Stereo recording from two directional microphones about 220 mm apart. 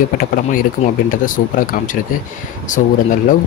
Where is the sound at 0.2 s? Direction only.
40° left (ahead or behind).